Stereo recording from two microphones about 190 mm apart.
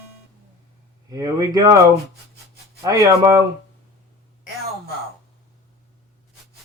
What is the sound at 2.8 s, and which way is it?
Speech, 20° right (ahead or behind).